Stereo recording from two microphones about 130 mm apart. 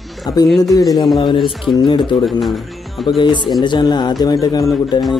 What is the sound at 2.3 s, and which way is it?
Speech, centre (ahead or behind).